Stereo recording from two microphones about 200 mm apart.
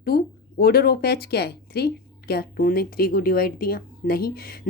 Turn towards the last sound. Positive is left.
turn(degrees=50)  # may be behind; listen again after turning